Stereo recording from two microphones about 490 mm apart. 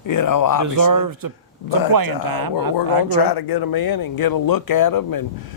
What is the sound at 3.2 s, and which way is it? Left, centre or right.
A man's voice, left.